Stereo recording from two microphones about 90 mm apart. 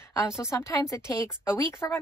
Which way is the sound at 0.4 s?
30° left (ahead or behind).